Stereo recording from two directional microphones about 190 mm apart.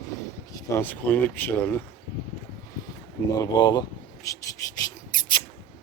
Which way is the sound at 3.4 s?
20° left (ahead or behind).